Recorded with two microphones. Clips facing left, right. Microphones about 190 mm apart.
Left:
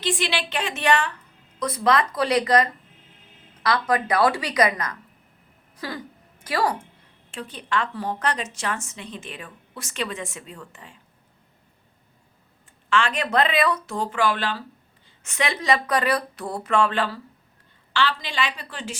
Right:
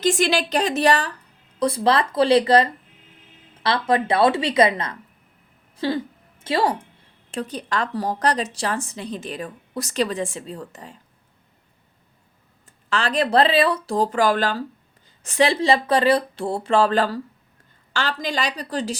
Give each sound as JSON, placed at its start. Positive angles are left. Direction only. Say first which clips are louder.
{"t": 0.0, "sound": "a woman's voice", "louder": "right 6 dB", "side_deg": -45}
{"t": 5.7, "sound": "a sound", "louder": "right 9 dB", "side_deg": -25}
{"t": 6.4, "sound": "a woman's voice", "louder": "right 3 dB", "side_deg": -25}
{"t": 7.3, "sound": "a woman's voice", "louder": "right 4 dB", "side_deg": -40}
{"t": 12.9, "sound": "a woman's voice", "louder": "right 3 dB", "side_deg": -35}